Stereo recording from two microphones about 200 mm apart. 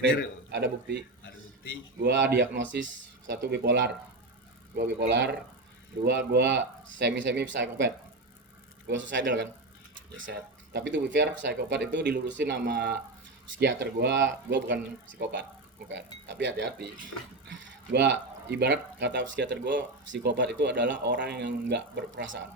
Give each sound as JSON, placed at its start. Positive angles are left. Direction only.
{"t": 0.5, "sound": "speech", "side_deg": -55}
{"t": 2.0, "sound": "speech", "side_deg": -65}